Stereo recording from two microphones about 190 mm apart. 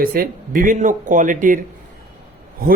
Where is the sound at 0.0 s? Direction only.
50° right (ahead or behind).